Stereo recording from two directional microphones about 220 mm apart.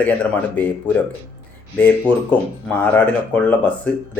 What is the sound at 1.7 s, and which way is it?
Speech, 10° left (ahead or behind).